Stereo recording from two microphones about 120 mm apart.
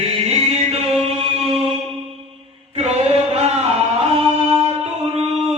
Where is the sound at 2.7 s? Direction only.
60° right (ahead or behind).